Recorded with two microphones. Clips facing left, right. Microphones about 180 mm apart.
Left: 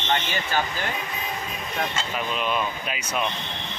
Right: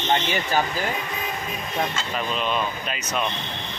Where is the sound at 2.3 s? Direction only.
5° left (ahead or behind).